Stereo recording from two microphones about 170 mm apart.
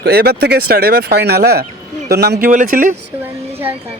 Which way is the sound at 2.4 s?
50° right (ahead or behind).